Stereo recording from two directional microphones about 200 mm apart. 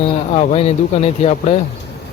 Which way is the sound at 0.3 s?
30° left (ahead or behind).